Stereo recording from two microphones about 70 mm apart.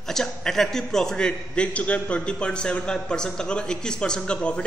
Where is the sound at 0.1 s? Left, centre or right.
Centre.